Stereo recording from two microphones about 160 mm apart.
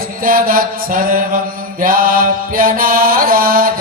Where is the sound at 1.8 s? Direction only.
60° right (ahead or behind).